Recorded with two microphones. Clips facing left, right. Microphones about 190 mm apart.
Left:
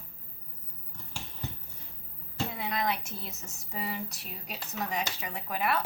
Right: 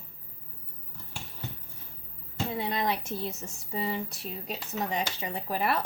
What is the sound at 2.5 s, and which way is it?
Speech, 30° right (ahead or behind).